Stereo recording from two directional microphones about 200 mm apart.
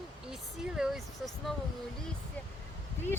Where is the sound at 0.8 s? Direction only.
5° right (ahead or behind).